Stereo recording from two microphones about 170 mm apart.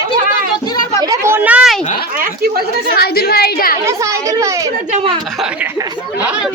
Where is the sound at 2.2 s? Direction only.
65° right (ahead or behind).